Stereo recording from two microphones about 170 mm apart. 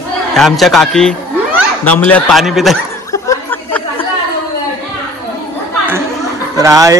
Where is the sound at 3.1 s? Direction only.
15° left (ahead or behind).